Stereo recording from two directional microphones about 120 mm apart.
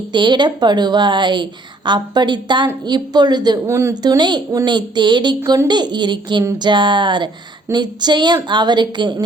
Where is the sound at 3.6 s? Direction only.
20° right (ahead or behind).